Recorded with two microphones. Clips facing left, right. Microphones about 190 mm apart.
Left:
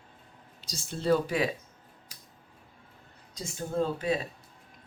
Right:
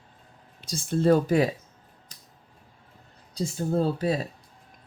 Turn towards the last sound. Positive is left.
turn(degrees=-35)  # may be behind; listen again after turning